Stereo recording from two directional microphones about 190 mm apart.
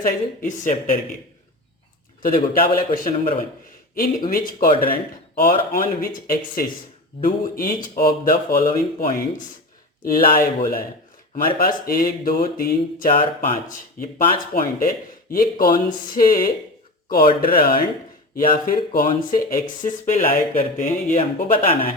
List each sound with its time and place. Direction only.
0.0 s speech: 40° left (ahead or behind)
2.2 s speech: 50° left (ahead or behind)